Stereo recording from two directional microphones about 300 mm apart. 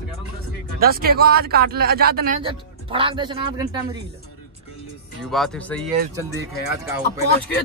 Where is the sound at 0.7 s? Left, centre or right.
Right.